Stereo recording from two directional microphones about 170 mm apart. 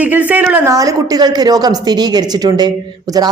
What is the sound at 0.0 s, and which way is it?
Speech, 10° right (ahead or behind).